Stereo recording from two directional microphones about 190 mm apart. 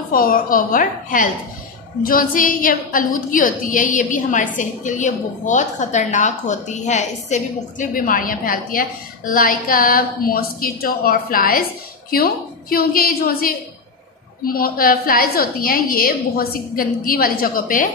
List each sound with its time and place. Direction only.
0.1 s a woman's voice: 50° left (ahead or behind)